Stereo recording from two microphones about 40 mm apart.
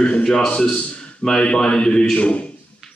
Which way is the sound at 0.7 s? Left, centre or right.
Left.